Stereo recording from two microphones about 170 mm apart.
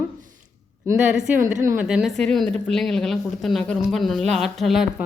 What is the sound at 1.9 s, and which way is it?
A woman's voice, 5° right (ahead or behind).